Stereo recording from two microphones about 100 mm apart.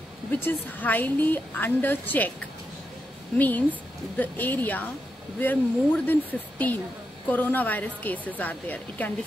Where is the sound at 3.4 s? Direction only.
15° left (ahead or behind).